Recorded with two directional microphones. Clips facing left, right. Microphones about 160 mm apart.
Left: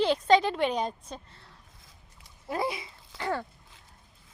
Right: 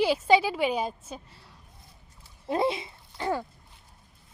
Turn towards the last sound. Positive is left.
turn(degrees=-15)  # may be behind; listen again after turning